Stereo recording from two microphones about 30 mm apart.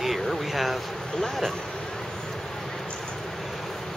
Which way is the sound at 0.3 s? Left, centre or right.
Centre.